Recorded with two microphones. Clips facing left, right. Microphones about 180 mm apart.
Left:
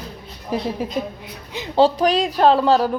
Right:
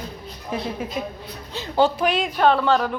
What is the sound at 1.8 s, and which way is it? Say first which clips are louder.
Speech: left 4 dB; 35° left (ahead or behind).